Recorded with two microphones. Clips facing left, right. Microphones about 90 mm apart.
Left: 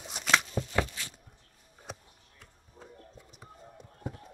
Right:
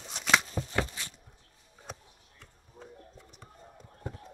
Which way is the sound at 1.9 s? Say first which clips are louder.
Left 1 dB; 5° left (ahead or behind).